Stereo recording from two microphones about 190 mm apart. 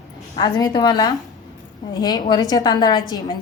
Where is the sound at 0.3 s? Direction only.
20° left (ahead or behind).